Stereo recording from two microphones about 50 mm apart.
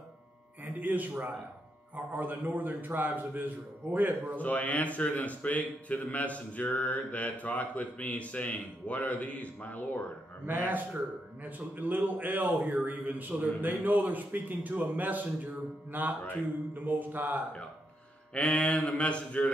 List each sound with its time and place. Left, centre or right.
0.7 s a man's voice: right
4.4 s speech: left
11.4 s a man's voice: right
18.3 s speech: left